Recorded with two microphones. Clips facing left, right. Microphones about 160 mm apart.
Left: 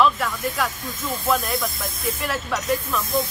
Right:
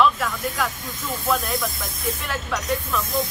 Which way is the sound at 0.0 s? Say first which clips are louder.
Even; centre (ahead or behind).